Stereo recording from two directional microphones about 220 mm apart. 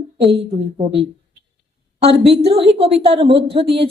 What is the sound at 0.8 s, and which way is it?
Speech, 25° right (ahead or behind).